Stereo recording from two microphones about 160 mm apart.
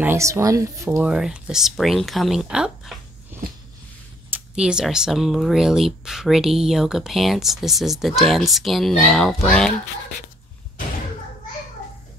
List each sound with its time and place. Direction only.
0.0 s a woman's voice: 15° right (ahead or behind)
0.8 s speech: 5° right (ahead or behind)